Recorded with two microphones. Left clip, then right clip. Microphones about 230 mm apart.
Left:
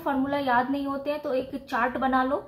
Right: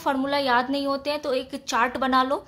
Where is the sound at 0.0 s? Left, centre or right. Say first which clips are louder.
Right 3 dB; right.